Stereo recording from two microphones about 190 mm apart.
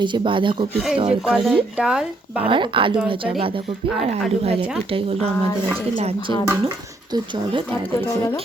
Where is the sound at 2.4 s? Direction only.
25° right (ahead or behind).